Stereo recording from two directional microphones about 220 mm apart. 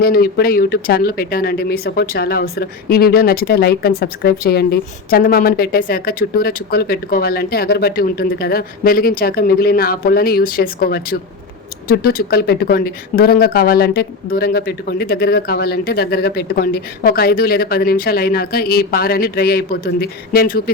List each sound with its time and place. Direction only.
0.0 s speech: 45° left (ahead or behind)